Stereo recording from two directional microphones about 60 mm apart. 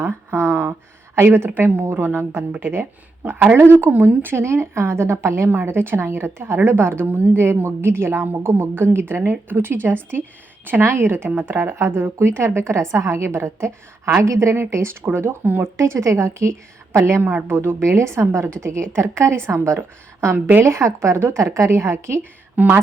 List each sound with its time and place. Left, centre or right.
0.0 s a sound: right
1.1 s a woman's voice: right
12.5 s a woman's voice: right
15.8 s a woman's voice: right
22.5 s speech: right